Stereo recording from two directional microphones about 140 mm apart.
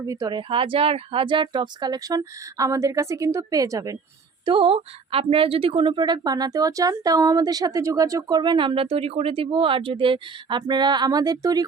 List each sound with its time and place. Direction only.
0.0 s speech: 25° right (ahead or behind)
4.4 s a woman's voice: 40° right (ahead or behind)